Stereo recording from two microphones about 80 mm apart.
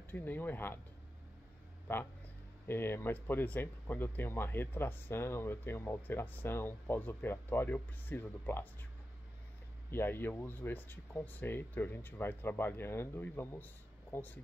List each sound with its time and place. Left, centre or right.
0.1 s speech: left
1.9 s speech: left
9.8 s speech: left